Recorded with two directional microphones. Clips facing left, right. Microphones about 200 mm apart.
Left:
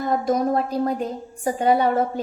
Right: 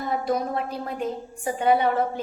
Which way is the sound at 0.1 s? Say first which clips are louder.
Left 5 dB; 45° left (ahead or behind).